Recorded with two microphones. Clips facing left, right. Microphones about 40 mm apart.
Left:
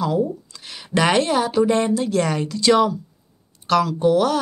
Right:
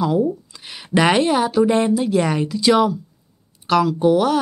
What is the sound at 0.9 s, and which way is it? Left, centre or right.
A woman's voice, centre.